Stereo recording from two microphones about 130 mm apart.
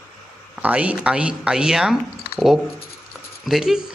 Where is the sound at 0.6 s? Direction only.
10° right (ahead or behind).